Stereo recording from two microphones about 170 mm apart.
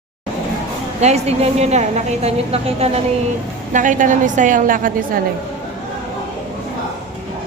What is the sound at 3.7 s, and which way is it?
A woman's voice, 50° right (ahead or behind).